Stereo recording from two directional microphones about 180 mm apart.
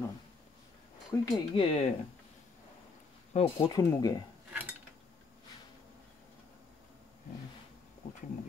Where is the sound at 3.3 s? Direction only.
25° left (ahead or behind).